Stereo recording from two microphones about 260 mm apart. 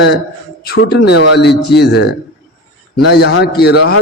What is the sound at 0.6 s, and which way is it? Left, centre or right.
A man's voice, left.